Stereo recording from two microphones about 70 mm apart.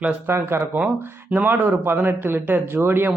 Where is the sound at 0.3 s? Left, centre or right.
Right.